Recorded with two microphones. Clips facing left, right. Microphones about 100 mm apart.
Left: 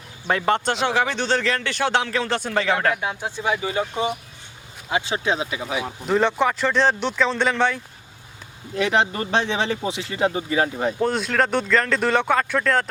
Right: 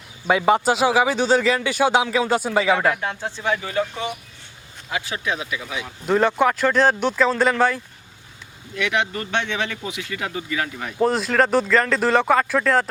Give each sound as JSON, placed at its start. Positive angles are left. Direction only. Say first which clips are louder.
{"t": 0.3, "sound": "a man's voice", "louder": "right 4 dB", "side_deg": -5}
{"t": 2.9, "sound": "speech", "louder": "left 1 dB", "side_deg": 10}
{"t": 6.1, "sound": "speech", "louder": "right 2 dB", "side_deg": 0}
{"t": 8.7, "sound": "speech", "louder": "left 3 dB", "side_deg": 35}
{"t": 11.0, "sound": "speech", "louder": "right 5 dB", "side_deg": 0}